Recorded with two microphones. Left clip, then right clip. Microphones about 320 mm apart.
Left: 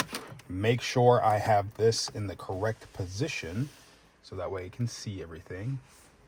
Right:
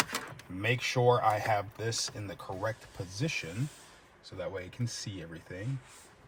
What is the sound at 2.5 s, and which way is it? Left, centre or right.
Speech, left.